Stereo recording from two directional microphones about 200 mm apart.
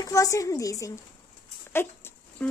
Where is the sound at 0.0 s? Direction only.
15° left (ahead or behind).